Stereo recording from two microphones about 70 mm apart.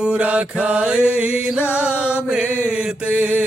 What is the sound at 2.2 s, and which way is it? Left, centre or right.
Male singing, centre.